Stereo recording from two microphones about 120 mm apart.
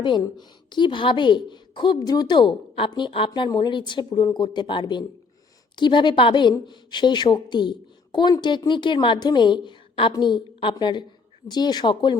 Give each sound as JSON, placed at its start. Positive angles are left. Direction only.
{"t": 0.0, "sound": "a woman's voice", "side_deg": 40}